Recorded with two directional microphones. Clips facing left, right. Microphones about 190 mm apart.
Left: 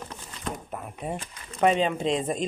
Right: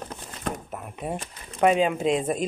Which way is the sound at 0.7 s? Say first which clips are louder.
Right 1 dB; 5° right (ahead or behind).